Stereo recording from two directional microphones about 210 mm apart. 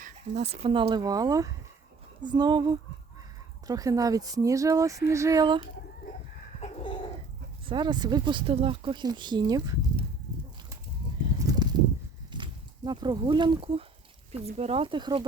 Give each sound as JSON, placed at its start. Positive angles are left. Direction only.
{"t": 0.0, "sound": "speech", "side_deg": -30}
{"t": 7.7, "sound": "speech", "side_deg": -20}
{"t": 11.3, "sound": "a sound", "side_deg": -15}
{"t": 12.3, "sound": "speech", "side_deg": -20}